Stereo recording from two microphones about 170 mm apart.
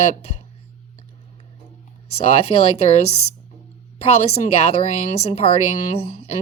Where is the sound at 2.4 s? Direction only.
40° left (ahead or behind).